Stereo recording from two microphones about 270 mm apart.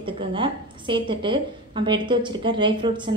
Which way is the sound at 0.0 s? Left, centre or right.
Centre.